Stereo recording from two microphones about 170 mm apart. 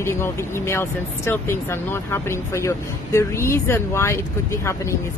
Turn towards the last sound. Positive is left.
turn(degrees=15)  # may be behind; listen again after turning